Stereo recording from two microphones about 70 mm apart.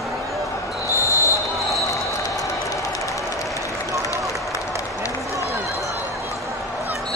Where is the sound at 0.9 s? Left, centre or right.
Left.